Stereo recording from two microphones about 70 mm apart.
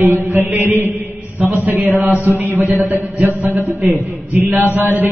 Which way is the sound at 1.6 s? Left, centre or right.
Right.